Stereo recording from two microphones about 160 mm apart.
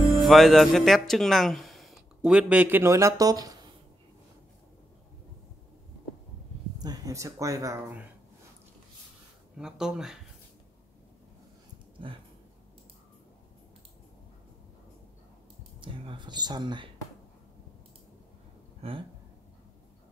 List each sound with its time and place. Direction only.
0.2 s speech: centre (ahead or behind); by 3.5 s 25° right (ahead or behind)
6.8 s speech: 20° right (ahead or behind)
9.6 s speech: 5° right (ahead or behind)
12.0 s a sound: 30° right (ahead or behind)
15.8 s speech: 30° right (ahead or behind)
18.8 s a sound: 35° right (ahead or behind)